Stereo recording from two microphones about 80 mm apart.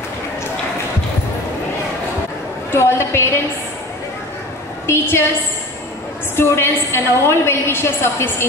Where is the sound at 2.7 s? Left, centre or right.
Left.